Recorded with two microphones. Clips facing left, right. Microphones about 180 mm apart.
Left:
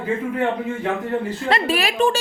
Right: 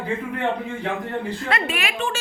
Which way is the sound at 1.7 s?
35° left (ahead or behind).